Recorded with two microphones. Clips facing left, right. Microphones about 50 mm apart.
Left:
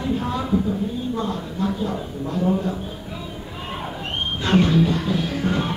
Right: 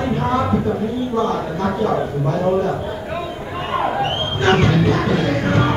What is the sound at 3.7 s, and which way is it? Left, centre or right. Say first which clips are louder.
Music: right 11 dB; right.